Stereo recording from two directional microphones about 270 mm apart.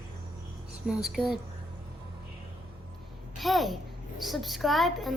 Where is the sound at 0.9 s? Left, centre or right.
Centre.